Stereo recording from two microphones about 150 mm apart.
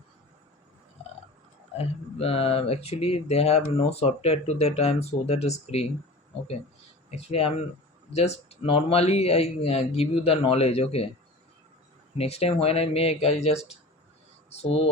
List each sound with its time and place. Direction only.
2.1 s speech: 40° left (ahead or behind)
7.1 s a man's voice: 40° left (ahead or behind)
12.1 s a man's voice: 40° left (ahead or behind)
14.6 s a man's voice: 40° left (ahead or behind)